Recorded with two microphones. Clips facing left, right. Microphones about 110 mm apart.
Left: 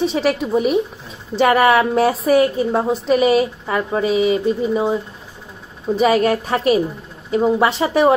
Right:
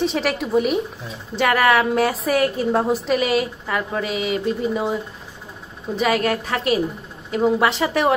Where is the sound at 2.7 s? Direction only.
Centre (ahead or behind).